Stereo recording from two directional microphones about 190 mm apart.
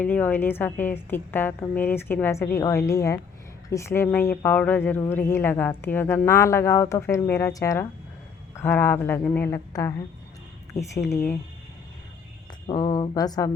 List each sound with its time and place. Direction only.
0.0 s speech: 10° left (ahead or behind)
11.1 s speech: 10° left (ahead or behind)
12.6 s speech: 25° left (ahead or behind)